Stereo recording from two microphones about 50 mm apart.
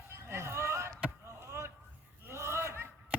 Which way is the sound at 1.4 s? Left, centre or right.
Right.